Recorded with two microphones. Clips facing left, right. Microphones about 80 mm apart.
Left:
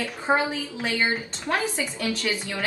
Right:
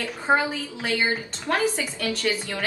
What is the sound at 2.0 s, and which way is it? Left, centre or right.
Speech, centre.